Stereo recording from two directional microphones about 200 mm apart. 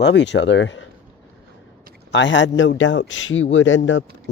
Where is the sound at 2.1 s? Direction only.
65° left (ahead or behind).